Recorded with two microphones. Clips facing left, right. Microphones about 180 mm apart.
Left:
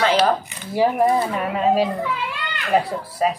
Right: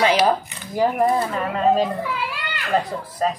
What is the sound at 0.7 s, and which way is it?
Speech, centre (ahead or behind).